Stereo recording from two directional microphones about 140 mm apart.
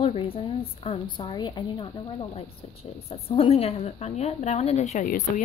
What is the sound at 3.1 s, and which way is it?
A woman's voice, 45° left (ahead or behind).